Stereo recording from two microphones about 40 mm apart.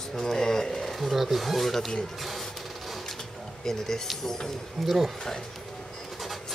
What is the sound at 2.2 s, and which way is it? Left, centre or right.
Printer, centre.